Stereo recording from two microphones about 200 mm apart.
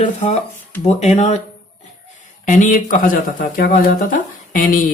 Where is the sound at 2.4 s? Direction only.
40° left (ahead or behind).